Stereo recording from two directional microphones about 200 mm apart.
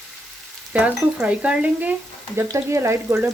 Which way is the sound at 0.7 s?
5° right (ahead or behind).